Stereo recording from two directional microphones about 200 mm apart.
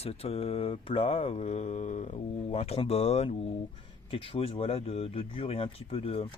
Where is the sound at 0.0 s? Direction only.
30° left (ahead or behind).